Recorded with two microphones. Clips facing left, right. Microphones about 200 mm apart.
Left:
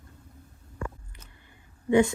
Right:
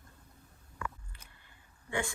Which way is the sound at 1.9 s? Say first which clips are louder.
Left 15 dB; 20° left (ahead or behind).